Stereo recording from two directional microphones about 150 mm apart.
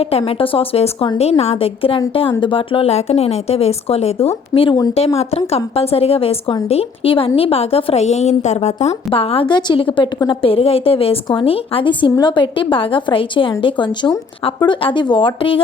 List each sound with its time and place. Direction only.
0.0 s a woman's voice: 40° left (ahead or behind)
4.9 s a woman's voice: 45° left (ahead or behind)